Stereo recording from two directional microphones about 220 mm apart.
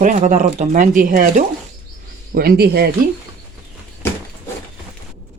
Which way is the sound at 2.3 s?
45° right (ahead or behind).